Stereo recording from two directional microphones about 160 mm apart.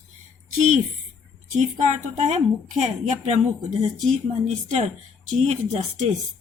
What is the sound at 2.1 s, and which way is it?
A woman's voice, 45° right (ahead or behind).